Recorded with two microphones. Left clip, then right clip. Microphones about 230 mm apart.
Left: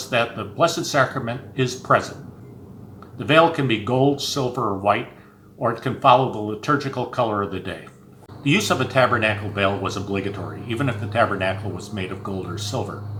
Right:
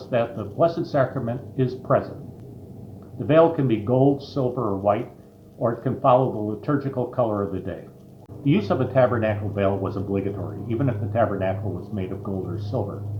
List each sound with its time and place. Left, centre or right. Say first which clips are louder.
0.1 s speech: left 2 dB; left
3.2 s a man's voice: left 1 dB; left